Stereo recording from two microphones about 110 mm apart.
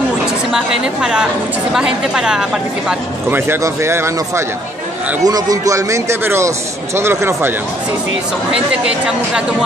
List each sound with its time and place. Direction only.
1.7 s speech: 5° right (ahead or behind)
3.3 s speech: 20° right (ahead or behind)
8.5 s speech: 10° right (ahead or behind)